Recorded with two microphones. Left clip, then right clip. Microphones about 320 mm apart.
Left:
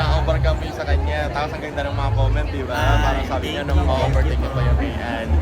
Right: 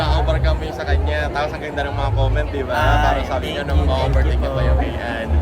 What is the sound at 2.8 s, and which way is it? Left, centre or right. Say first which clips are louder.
Speech: right 4 dB; centre.